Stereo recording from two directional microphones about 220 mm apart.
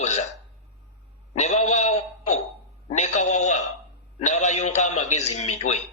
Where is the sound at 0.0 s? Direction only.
30° left (ahead or behind).